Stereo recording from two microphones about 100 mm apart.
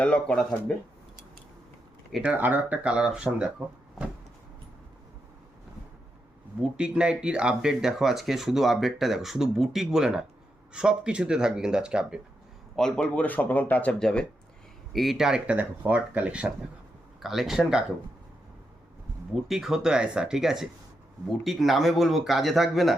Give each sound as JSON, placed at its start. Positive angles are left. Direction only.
{"t": 0.0, "sound": "speech", "side_deg": 10}
{"t": 2.2, "sound": "speech", "side_deg": -15}
{"t": 6.6, "sound": "speech", "side_deg": -10}
{"t": 12.7, "sound": "speech", "side_deg": 5}
{"t": 17.2, "sound": "speech", "side_deg": 0}
{"t": 19.3, "sound": "speech", "side_deg": -5}